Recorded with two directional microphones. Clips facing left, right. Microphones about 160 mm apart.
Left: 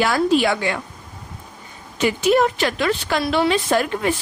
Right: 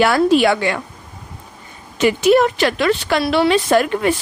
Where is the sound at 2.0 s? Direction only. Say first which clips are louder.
Right 4 dB; 75° right (ahead or behind).